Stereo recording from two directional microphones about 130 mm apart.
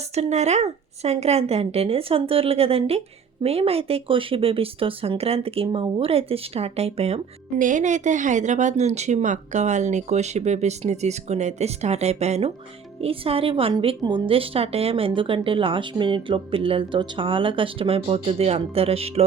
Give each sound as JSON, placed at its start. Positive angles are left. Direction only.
{"t": 0.1, "sound": "a woman's voice", "side_deg": -55}
{"t": 7.6, "sound": "a woman's voice", "side_deg": -75}